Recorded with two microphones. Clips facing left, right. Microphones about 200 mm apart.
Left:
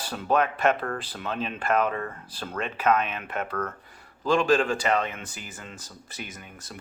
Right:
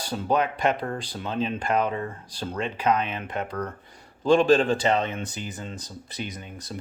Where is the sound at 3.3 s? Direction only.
15° right (ahead or behind).